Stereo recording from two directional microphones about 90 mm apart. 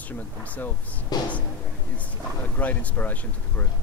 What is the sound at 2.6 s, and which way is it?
Speech, 15° left (ahead or behind).